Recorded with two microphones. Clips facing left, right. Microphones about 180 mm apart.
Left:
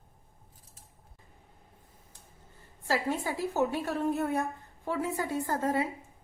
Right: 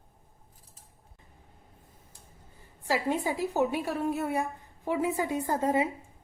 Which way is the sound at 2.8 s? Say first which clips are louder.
Right 2 dB; 15° right (ahead or behind).